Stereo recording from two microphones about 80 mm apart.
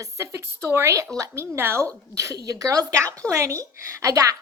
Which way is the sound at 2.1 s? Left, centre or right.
Right.